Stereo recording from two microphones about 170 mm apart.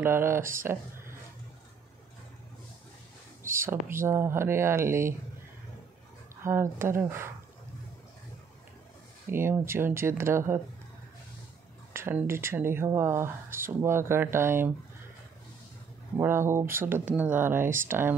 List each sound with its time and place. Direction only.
0.0 s speech: 15° right (ahead or behind)
0.4 s speech: 55° right (ahead or behind)
0.7 s speech: 15° right (ahead or behind)
3.6 s speech: 15° right (ahead or behind)
6.4 s speech: 15° right (ahead or behind)
9.3 s speech: 15° right (ahead or behind)
11.9 s speech: 15° right (ahead or behind)
16.2 s speech: 15° right (ahead or behind)